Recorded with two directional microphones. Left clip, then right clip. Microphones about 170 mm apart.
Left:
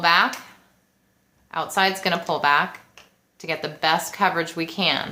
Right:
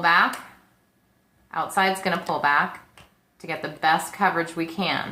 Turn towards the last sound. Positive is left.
turn(degrees=40)  # may be behind; listen again after turning